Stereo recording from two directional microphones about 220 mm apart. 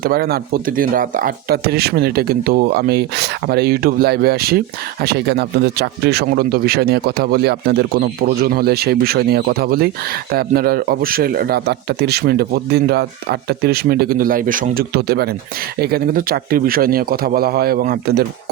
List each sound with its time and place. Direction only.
0.0 s speech: 45° right (ahead or behind)